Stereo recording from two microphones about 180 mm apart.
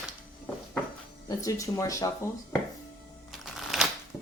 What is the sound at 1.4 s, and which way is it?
Speech, 20° left (ahead or behind).